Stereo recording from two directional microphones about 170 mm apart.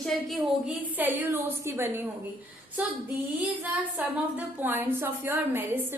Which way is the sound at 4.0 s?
10° right (ahead or behind).